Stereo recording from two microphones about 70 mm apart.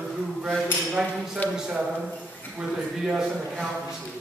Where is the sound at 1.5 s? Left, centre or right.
Centre.